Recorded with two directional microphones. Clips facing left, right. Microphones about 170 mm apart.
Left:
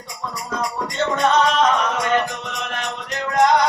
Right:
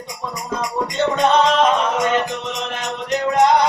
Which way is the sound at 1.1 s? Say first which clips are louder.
Right 1 dB; 20° right (ahead or behind).